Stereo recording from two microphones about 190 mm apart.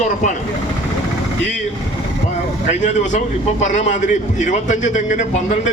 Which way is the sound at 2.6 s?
40° left (ahead or behind).